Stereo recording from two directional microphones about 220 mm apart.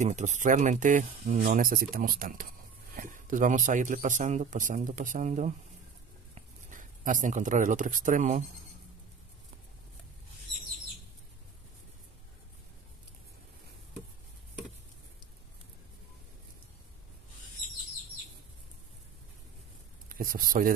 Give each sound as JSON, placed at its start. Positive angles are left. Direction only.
{"t": 0.0, "sound": "speech", "side_deg": -35}
{"t": 20.1, "sound": "speech", "side_deg": -40}